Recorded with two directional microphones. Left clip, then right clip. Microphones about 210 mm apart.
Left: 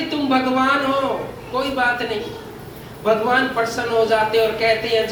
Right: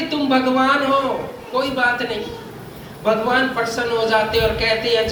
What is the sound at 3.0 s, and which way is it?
A man's voice, 50° right (ahead or behind).